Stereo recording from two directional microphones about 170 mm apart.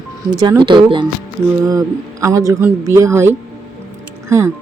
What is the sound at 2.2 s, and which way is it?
Speech, 20° right (ahead or behind).